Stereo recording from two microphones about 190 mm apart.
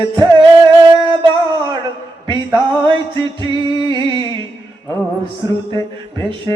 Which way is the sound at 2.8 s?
25° right (ahead or behind).